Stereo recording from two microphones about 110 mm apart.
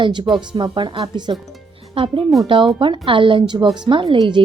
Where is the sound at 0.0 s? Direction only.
45° right (ahead or behind).